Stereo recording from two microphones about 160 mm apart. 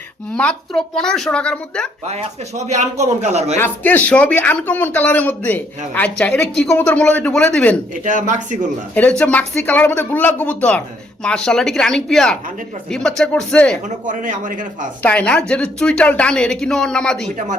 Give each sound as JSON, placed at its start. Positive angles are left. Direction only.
{"t": 0.3, "sound": "speech", "side_deg": 5}
{"t": 2.0, "sound": "speech", "side_deg": -45}
{"t": 3.6, "sound": "speech", "side_deg": 10}
{"t": 7.9, "sound": "speech", "side_deg": -50}
{"t": 9.0, "sound": "speech", "side_deg": 10}
{"t": 13.8, "sound": "speech", "side_deg": -55}
{"t": 15.0, "sound": "speech", "side_deg": 5}